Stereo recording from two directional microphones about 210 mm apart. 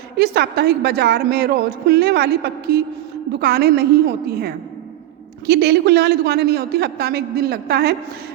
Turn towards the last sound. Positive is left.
turn(degrees=-50)  # may be behind; listen again after turning